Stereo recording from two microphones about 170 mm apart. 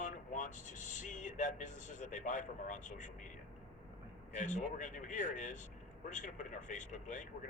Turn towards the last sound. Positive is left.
turn(degrees=45)  # may be behind; listen again after turning